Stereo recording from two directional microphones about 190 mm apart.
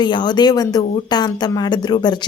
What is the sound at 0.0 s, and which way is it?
Speech, 25° left (ahead or behind).